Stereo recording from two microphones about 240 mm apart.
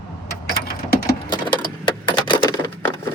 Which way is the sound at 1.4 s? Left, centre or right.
Centre.